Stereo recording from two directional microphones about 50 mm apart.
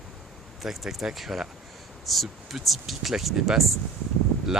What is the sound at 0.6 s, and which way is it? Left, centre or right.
Speech, centre.